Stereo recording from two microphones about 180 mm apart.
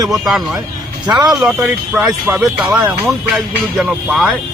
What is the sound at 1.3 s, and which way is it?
Speech, centre (ahead or behind).